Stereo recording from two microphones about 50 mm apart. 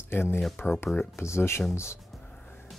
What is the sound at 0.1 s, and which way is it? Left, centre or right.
Speech, left.